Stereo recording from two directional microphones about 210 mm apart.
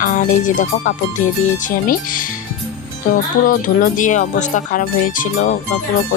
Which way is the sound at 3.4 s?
40° left (ahead or behind).